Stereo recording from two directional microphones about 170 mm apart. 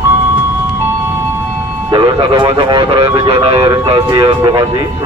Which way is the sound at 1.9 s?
25° right (ahead or behind).